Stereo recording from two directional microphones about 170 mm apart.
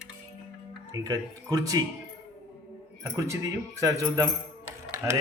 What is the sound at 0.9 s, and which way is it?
Speech, 20° right (ahead or behind).